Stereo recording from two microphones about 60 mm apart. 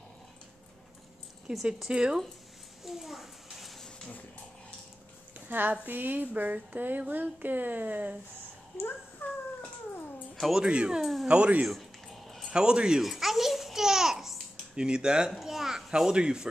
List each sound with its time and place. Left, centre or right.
1.5 s speech: centre
2.8 s a sound: centre
5.5 s speech: right
9.2 s dog: left
10.4 s speech: centre
11.0 s speech: centre
11.2 s speech: centre
11.6 s a sound: centre
12.5 s speech: centre
13.0 s babbling: centre
16.1 s speech: centre